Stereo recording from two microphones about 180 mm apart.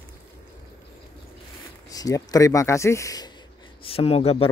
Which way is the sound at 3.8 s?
35° left (ahead or behind).